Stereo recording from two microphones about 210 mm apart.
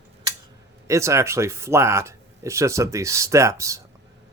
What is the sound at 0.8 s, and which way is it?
Speech, 15° right (ahead or behind).